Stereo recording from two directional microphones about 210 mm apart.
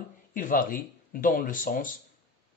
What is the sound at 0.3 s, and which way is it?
Speech, 40° left (ahead or behind).